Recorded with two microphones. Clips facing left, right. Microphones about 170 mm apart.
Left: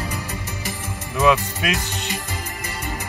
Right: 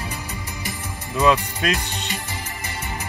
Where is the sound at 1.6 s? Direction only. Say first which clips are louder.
Right 2 dB; 10° left (ahead or behind).